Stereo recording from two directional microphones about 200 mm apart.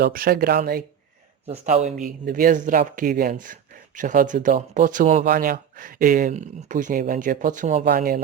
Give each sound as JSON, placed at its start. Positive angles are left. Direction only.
{"t": 0.0, "sound": "speech", "side_deg": -50}
{"t": 1.5, "sound": "speech", "side_deg": -30}